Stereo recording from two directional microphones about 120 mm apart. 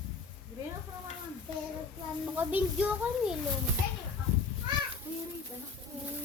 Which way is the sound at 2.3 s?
15° right (ahead or behind).